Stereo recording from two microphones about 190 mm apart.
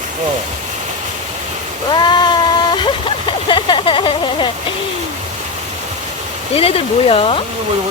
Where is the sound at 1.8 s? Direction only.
25° left (ahead or behind).